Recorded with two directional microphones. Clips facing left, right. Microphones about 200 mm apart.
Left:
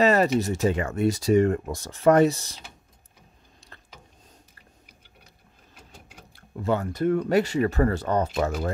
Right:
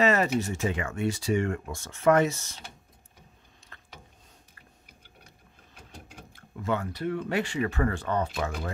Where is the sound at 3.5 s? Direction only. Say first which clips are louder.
Left 3 dB; 35° left (ahead or behind).